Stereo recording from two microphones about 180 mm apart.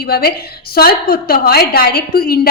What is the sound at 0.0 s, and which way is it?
A woman's voice, 60° left (ahead or behind).